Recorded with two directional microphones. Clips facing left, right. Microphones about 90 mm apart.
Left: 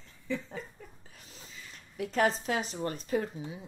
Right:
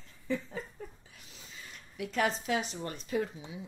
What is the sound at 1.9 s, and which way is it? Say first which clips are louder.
A woman's voice: left 3 dB; 40° left (ahead or behind).